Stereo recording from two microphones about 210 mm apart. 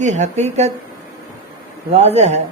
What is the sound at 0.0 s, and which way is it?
Speech, 35° right (ahead or behind).